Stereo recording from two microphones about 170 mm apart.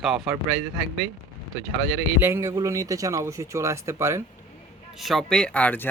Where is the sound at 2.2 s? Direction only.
15° right (ahead or behind).